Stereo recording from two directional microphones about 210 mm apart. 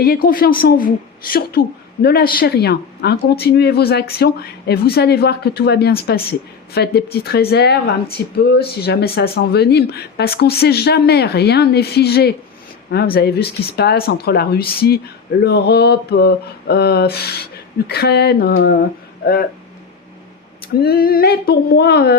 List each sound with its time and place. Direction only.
0.0 s a woman's voice: 45° left (ahead or behind)
20.8 s a woman's voice: 45° left (ahead or behind)